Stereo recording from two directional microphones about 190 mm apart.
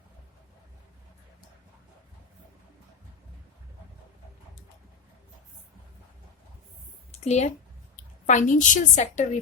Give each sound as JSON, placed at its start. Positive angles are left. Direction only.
{"t": 7.1, "sound": "a woman's voice", "side_deg": 35}